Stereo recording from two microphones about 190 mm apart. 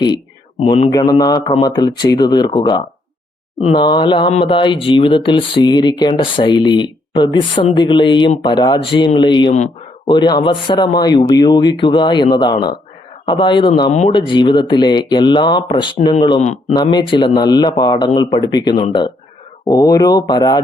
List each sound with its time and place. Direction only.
0.6 s a man's voice: 30° left (ahead or behind)
0.9 s speech: 20° left (ahead or behind)
16.4 s a man's voice: 35° left (ahead or behind)
16.7 s speech: 20° left (ahead or behind)